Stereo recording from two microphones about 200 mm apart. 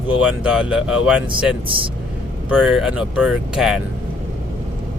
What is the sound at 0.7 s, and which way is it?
Speech, 5° right (ahead or behind).